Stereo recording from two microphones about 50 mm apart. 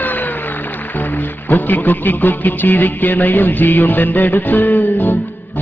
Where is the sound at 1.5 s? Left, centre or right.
Left.